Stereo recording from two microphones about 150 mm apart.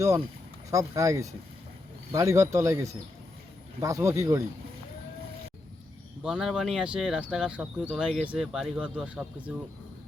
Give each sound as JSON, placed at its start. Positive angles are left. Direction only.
{"t": 0.7, "sound": "speech", "side_deg": -20}
{"t": 6.2, "sound": "speech", "side_deg": -5}